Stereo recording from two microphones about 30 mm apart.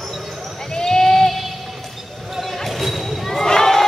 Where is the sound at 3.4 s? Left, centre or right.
Centre.